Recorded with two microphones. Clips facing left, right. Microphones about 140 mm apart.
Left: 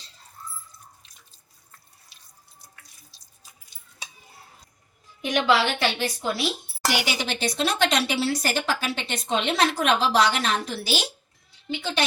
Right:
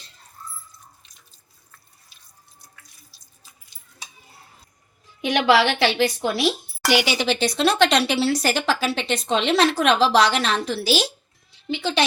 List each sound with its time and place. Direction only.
5.2 s a woman's voice: 75° right (ahead or behind)
6.8 s speech: 85° right